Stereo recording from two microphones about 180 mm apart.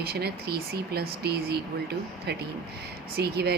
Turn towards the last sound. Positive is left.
turn(degrees=-60)  # may be behind; listen again after turning